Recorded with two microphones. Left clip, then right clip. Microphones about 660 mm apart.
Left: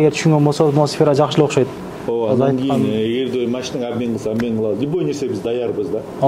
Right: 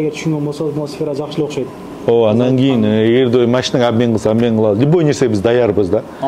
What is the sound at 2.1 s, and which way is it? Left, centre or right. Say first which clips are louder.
Speech: right 5 dB; right.